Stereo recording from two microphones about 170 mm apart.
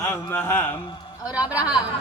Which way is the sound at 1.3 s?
10° right (ahead or behind).